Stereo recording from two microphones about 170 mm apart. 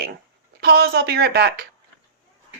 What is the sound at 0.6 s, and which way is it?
A woman's voice, 65° right (ahead or behind).